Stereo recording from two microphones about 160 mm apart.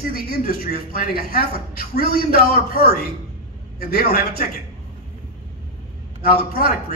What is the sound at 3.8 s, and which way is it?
Speech, 75° left (ahead or behind).